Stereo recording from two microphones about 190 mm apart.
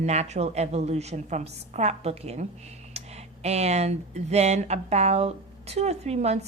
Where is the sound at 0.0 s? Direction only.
35° right (ahead or behind).